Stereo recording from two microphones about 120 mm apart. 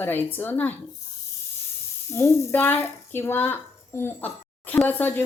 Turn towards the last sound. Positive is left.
turn(degrees=15)  # may be behind; listen again after turning